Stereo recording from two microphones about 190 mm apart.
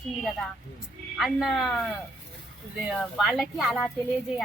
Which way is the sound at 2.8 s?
Centre (ahead or behind).